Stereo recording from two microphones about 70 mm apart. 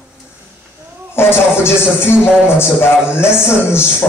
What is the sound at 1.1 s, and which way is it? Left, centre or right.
Music, left.